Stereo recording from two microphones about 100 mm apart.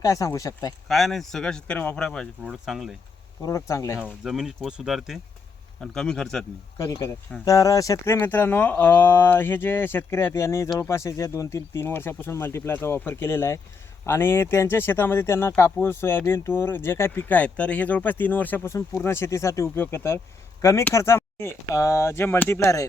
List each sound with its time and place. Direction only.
0.0 s speech: 35° left (ahead or behind)
0.9 s speech: centre (ahead or behind)
2.4 s speech: 5° right (ahead or behind)
3.4 s speech: 30° left (ahead or behind)
3.9 s speech: 10° right (ahead or behind)
6.7 s speech: 35° left (ahead or behind)